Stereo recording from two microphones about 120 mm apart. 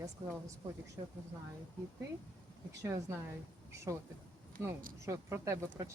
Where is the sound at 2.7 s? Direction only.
25° right (ahead or behind).